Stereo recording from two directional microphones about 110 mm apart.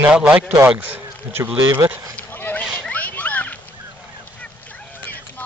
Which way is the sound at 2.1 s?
15° left (ahead or behind).